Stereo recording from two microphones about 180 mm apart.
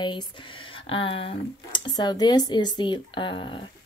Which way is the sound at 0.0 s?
25° left (ahead or behind).